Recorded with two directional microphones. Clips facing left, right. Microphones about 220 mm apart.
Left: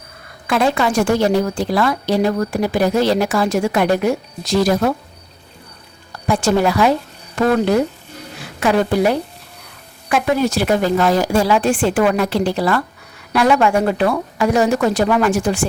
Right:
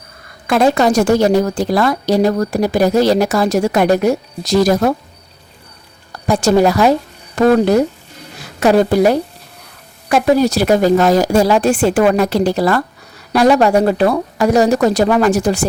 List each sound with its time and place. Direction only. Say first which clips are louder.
0.4 s speech: right 4 dB; 45° right (ahead or behind)
6.2 s speech: right 4 dB; 40° right (ahead or behind)